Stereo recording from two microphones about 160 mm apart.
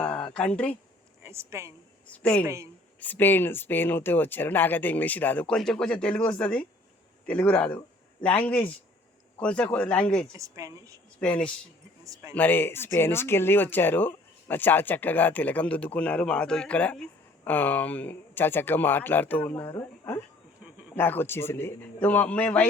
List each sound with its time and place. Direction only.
0.0 s a sound: 5° left (ahead or behind)
0.3 s speech: 10° left (ahead or behind)
1.2 s a woman's voice: 15° right (ahead or behind)
2.0 s speech: 5° left (ahead or behind)
2.4 s speech: 20° right (ahead or behind)
3.0 s speech: 10° left (ahead or behind)
10.3 s speech: 20° right (ahead or behind)
11.2 s speech: 5° left (ahead or behind)
12.0 s speech: 20° right (ahead or behind)
12.3 s speech: 10° left (ahead or behind)